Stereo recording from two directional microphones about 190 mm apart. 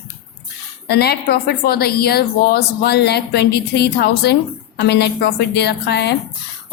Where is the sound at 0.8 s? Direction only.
55° left (ahead or behind).